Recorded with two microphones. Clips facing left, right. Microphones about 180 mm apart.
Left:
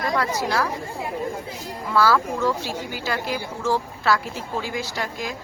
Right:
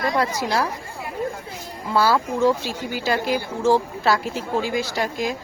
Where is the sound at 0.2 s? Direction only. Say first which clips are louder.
Right 1 dB; 25° right (ahead or behind).